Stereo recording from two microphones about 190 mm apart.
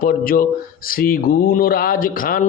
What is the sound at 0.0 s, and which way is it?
Speech, 50° left (ahead or behind).